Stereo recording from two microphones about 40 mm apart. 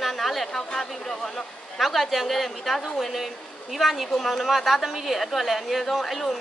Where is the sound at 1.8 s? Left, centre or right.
Centre.